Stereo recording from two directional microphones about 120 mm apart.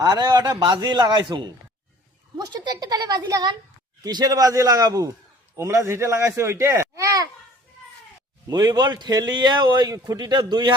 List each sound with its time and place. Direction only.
0.0 s a man's voice: 30° right (ahead or behind)
8.4 s a man's voice: 35° right (ahead or behind)